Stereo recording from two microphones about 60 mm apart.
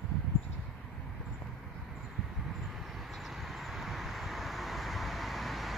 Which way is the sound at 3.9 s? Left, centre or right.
Centre.